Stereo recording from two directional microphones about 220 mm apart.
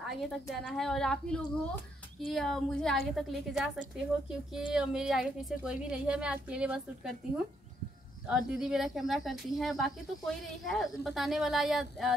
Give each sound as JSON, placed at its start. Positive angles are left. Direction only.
{"t": 0.0, "sound": "a woman's voice", "side_deg": 0}
{"t": 8.3, "sound": "a woman's voice", "side_deg": 0}